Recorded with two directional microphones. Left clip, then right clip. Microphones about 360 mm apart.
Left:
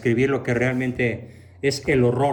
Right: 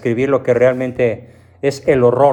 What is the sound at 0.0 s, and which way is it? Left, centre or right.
Speech, centre.